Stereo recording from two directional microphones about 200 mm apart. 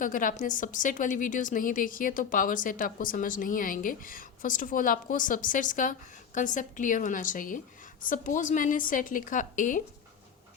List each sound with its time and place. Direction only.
0.0 s a woman's voice: 40° left (ahead or behind)